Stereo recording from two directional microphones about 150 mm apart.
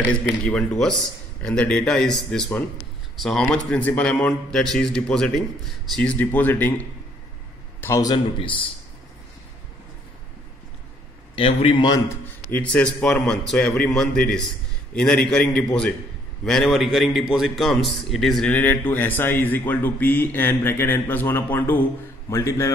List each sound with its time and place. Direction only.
0.5 s a man's voice: 5° left (ahead or behind)
7.8 s a man's voice: 20° left (ahead or behind)
11.3 s a man's voice: 40° left (ahead or behind)
11.9 s a man's voice: 15° left (ahead or behind)